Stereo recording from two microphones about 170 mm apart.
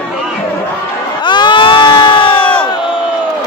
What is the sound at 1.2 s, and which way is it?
Crowd, 25° left (ahead or behind).